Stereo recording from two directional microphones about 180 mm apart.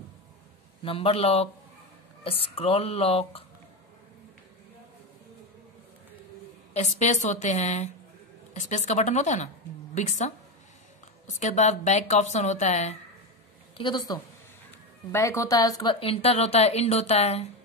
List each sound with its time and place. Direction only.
0.8 s a woman's voice: 30° left (ahead or behind)
6.7 s a woman's voice: 40° left (ahead or behind)
13.7 s a woman's voice: 25° left (ahead or behind)